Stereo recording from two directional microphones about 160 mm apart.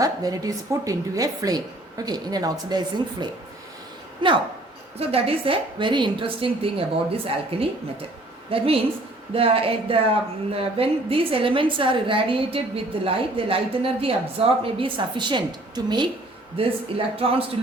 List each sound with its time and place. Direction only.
0.0 s a woman's voice: 25° right (ahead or behind)
17.2 s a woman's voice: 35° right (ahead or behind)